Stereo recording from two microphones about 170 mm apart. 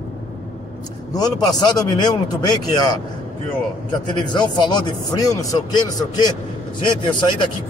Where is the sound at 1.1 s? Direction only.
25° left (ahead or behind).